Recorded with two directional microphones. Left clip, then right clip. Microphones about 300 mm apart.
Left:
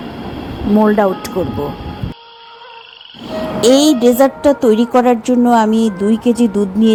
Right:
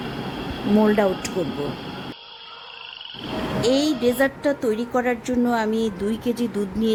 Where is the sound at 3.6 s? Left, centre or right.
Centre.